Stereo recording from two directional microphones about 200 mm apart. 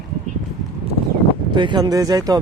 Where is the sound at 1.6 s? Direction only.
20° right (ahead or behind).